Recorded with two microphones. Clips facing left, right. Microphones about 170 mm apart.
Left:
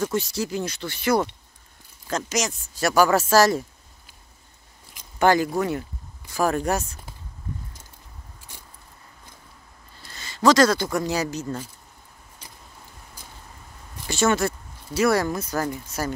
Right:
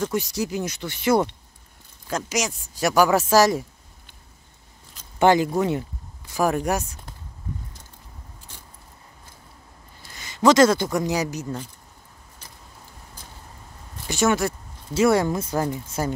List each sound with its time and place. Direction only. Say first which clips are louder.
0.1 s speech: even; 15° right (ahead or behind)
2.0 s speech: even; 10° right (ahead or behind)
4.9 s a sound: even; 10° left (ahead or behind)
5.2 s speech: right 2 dB; 20° right (ahead or behind)
10.0 s speech: right 1 dB; 15° right (ahead or behind)
14.0 s speech: even; 15° right (ahead or behind)